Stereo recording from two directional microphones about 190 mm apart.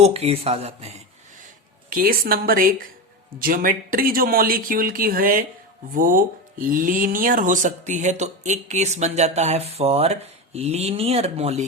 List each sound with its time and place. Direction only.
0.0 s speech: 35° right (ahead or behind)
1.9 s speech: 50° right (ahead or behind); by 11.6 s 35° right (ahead or behind)